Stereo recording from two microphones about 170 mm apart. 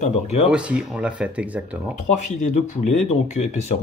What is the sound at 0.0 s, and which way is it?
Speech, 40° left (ahead or behind).